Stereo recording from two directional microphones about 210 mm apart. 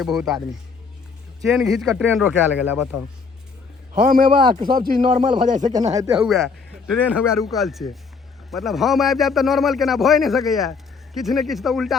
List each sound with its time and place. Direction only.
0.0 s a man's voice: centre (ahead or behind)
1.5 s a man's voice: centre (ahead or behind)
4.0 s speech: 40° right (ahead or behind)
6.1 s a man's voice: centre (ahead or behind)